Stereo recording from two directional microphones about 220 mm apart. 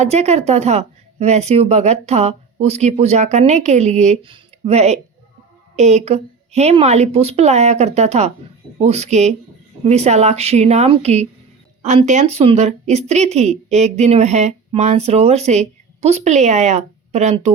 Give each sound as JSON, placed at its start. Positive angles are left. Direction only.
{"t": 0.0, "sound": "speech", "side_deg": -30}